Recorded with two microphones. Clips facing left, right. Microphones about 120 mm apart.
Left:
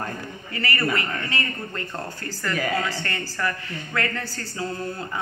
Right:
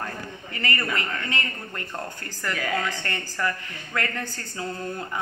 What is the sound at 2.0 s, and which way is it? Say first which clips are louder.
Speech: left 2 dB; 15° right (ahead or behind).